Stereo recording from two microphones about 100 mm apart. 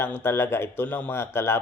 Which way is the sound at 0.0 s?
25° left (ahead or behind).